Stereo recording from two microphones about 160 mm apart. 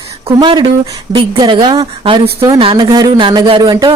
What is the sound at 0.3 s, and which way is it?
Speech, 30° right (ahead or behind).